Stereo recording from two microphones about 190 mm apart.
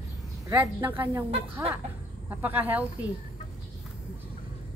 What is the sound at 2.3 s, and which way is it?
Speech, 10° right (ahead or behind).